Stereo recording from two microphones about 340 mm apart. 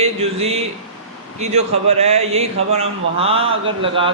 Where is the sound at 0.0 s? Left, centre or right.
Centre.